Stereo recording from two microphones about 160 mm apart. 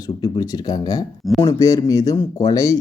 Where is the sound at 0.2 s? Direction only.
25° left (ahead or behind).